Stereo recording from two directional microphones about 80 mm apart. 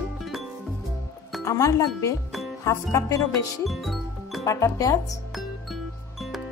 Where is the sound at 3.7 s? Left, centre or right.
Centre.